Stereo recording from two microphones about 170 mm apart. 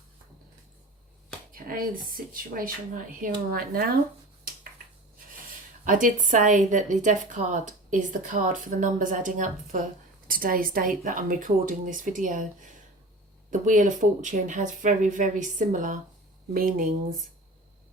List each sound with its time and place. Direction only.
1.5 s speech: 55° right (ahead or behind)
5.8 s a woman's voice: 50° right (ahead or behind)
13.5 s a woman's voice: 45° right (ahead or behind)